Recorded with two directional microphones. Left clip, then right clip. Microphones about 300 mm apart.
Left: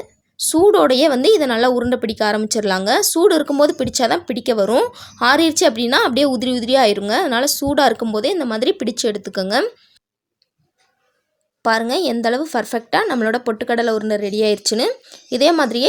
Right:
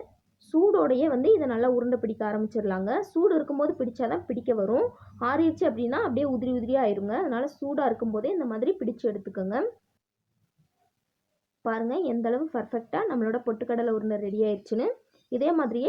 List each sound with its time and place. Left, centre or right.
0.5 s a woman's voice: left
11.6 s a woman's voice: left